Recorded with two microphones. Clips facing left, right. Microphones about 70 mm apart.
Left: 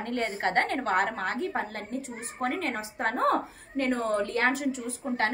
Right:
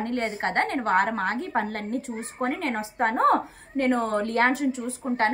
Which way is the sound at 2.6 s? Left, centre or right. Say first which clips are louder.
Right 5 dB; right.